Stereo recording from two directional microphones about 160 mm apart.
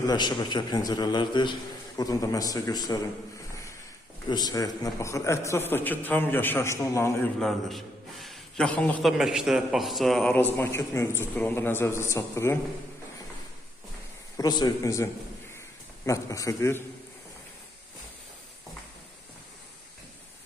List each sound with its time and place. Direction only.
0.0 s a man's voice: 25° left (ahead or behind)
4.3 s a man's voice: 25° left (ahead or behind)
7.3 s a man's voice: centre (ahead or behind); by 12.5 s 15° left (ahead or behind)
14.3 s a man's voice: 20° left (ahead or behind)